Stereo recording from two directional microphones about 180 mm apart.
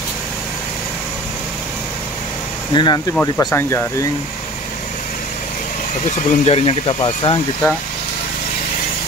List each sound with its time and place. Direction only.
2.7 s speech: 25° left (ahead or behind)
6.0 s speech: 35° left (ahead or behind)